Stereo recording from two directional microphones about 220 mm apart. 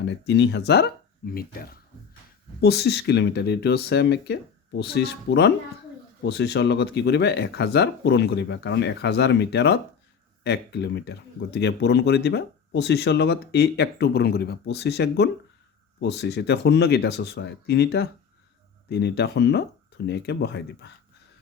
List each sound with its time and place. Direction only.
0.0 s speech: 55° left (ahead or behind)